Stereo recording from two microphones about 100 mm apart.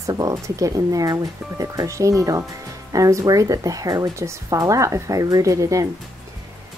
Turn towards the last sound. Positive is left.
turn(degrees=-35)  # may be behind; listen again after turning